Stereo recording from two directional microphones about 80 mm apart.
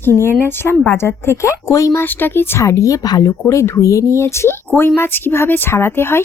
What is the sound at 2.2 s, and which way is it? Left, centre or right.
Speech, left.